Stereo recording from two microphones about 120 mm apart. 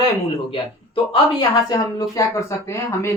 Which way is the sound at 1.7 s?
25° left (ahead or behind).